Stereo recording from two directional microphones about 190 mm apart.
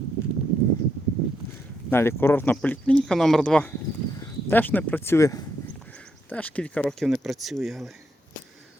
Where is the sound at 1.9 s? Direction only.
15° left (ahead or behind).